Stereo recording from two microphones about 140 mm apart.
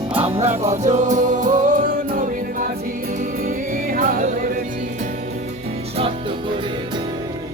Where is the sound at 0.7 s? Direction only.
60° right (ahead or behind).